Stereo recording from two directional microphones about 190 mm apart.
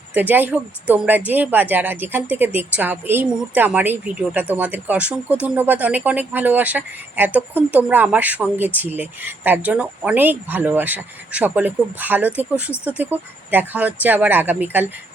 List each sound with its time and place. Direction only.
0.1 s speech: 10° right (ahead or behind)